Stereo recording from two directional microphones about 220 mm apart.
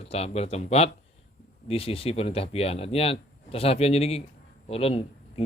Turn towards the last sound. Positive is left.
turn(degrees=25)  # may be behind; listen again after turning